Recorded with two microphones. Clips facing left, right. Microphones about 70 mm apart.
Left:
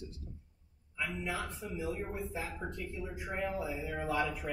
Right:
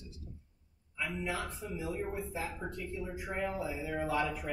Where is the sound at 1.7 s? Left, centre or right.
Centre.